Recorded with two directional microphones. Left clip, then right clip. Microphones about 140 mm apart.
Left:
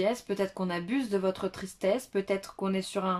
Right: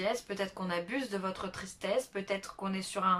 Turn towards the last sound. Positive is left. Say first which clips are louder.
# left 1 dB
turn(degrees=30)  # may be behind; listen again after turning